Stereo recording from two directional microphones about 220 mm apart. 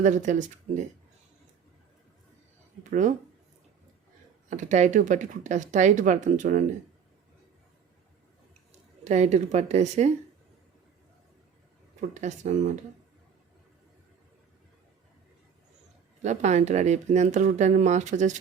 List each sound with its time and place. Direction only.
0.0 s speech: 35° right (ahead or behind)
2.9 s speech: 35° right (ahead or behind)
4.4 s speech: 30° right (ahead or behind)
9.0 s speech: 30° right (ahead or behind)
11.9 s speech: 35° right (ahead or behind)
16.2 s speech: 30° right (ahead or behind)